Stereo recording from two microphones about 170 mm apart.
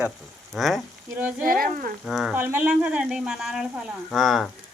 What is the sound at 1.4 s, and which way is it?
Speech, 55° right (ahead or behind).